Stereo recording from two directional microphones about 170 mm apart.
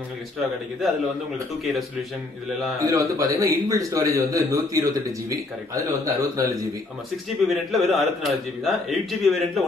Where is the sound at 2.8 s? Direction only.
20° right (ahead or behind).